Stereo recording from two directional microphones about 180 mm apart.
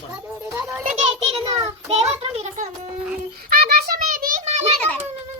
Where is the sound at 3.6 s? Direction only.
55° right (ahead or behind); by 4.7 s 40° right (ahead or behind).